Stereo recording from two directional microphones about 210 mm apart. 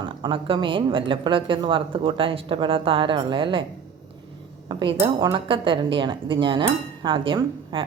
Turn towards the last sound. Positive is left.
turn(degrees=-25)  # may be behind; listen again after turning